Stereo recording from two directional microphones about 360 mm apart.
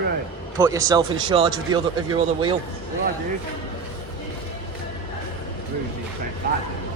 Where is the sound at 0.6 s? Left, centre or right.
Centre.